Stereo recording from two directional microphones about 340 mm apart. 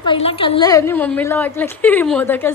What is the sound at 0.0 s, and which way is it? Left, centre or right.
A woman's voice, centre.